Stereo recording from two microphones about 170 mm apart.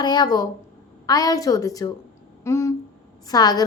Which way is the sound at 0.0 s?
25° left (ahead or behind).